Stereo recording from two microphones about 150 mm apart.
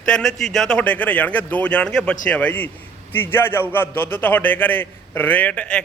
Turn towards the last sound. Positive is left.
turn(degrees=10)  # may be behind; listen again after turning